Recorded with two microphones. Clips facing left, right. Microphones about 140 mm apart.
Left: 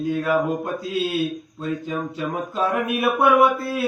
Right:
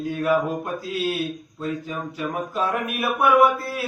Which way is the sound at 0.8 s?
25° left (ahead or behind).